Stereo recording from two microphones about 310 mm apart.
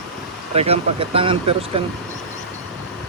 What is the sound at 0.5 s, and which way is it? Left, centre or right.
Speech, centre.